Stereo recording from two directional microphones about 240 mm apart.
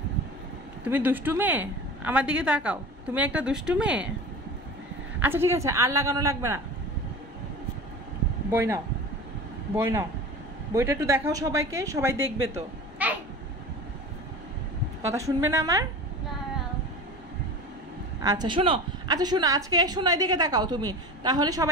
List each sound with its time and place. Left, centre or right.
0.8 s a woman's voice: centre
5.2 s a woman's voice: centre
8.5 s a woman's voice: centre
13.0 s babbling: centre
15.1 s a woman's voice: centre
18.2 s a woman's voice: centre